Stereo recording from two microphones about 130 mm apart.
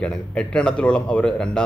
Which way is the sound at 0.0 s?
5° left (ahead or behind).